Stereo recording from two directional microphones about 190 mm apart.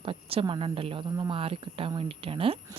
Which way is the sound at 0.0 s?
30° right (ahead or behind).